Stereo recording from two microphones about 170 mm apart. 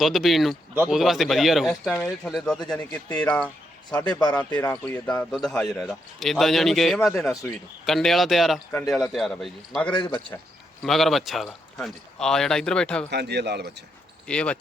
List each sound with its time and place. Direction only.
0.0 s speech: centre (ahead or behind)
4.1 s a man's voice: 25° left (ahead or behind)
4.4 s speech: 10° left (ahead or behind)
7.2 s speech: 15° left (ahead or behind)
7.9 s speech: centre (ahead or behind)
9.9 s a man's voice: 30° left (ahead or behind)
10.8 s speech: centre (ahead or behind)
13.1 s speech: 80° right
14.3 s speech: 5° left (ahead or behind)